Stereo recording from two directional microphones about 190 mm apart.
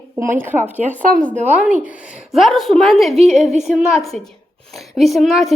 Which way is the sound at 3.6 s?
Centre (ahead or behind).